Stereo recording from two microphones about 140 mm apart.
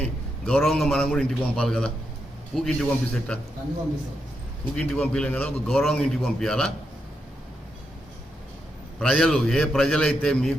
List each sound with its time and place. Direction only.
0.0 s a man's voice: 10° left (ahead or behind)
4.8 s a man's voice: 10° left (ahead or behind)
9.0 s a man's voice: 5° left (ahead or behind)